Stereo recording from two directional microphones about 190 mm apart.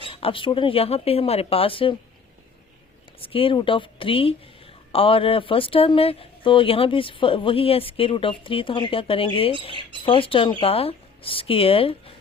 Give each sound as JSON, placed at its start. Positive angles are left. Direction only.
{"t": 0.1, "sound": "speech", "side_deg": 30}
{"t": 3.2, "sound": "speech", "side_deg": 30}